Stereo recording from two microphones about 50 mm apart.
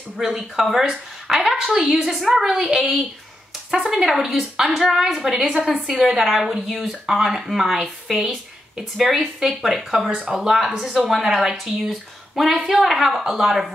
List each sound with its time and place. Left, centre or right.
0.2 s a woman's voice: centre
2.4 s a woman's voice: centre
2.7 s a woman's voice: centre